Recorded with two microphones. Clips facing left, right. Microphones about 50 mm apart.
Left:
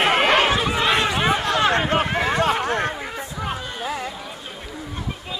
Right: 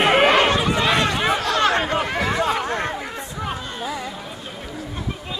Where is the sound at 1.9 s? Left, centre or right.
Left.